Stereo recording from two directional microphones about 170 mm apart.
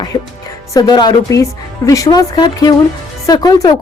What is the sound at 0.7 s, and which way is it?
Speech, 25° left (ahead or behind).